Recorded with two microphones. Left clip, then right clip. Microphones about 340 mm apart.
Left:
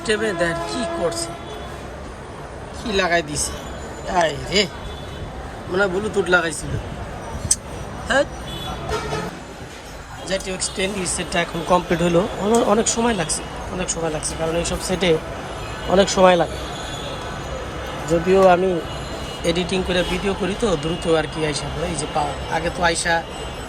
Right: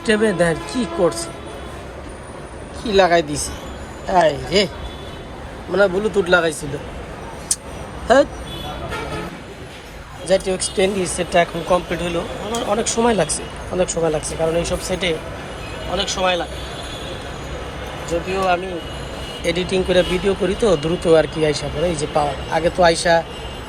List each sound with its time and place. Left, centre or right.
0.0 s speech: centre
2.8 s speech: centre
5.7 s speech: centre
8.0 s speech: centre
10.2 s speech: centre
18.3 s speech: centre